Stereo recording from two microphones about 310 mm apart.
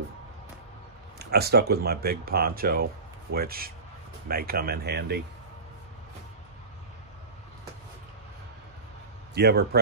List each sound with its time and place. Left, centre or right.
1.2 s speech: right
9.3 s speech: right